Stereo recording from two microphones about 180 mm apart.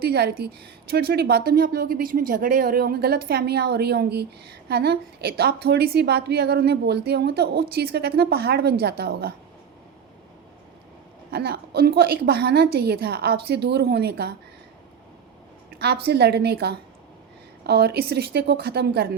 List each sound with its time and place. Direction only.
0.0 s a woman's voice: 60° right (ahead or behind)
11.3 s a woman's voice: 65° right (ahead or behind)
15.7 s a woman's voice: 60° right (ahead or behind)